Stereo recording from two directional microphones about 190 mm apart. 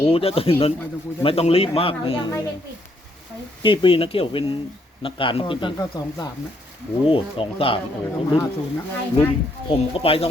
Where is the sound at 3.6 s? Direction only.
25° left (ahead or behind).